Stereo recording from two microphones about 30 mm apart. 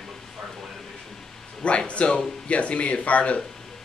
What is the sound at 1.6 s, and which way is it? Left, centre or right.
Speech, left.